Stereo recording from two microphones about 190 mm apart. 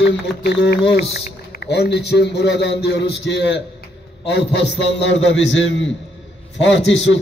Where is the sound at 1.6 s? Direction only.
60° left (ahead or behind).